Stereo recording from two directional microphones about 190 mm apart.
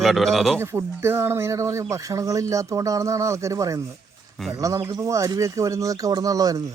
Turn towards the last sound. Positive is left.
turn(degrees=-20)  # may be behind; listen again after turning